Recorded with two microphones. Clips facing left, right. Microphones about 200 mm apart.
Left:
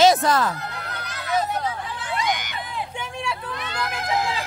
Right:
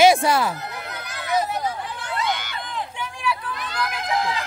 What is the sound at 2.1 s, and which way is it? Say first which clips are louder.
Hubbub: left 1 dB; 15° left (ahead or behind).